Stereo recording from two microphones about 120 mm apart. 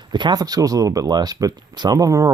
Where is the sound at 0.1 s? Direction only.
35° right (ahead or behind).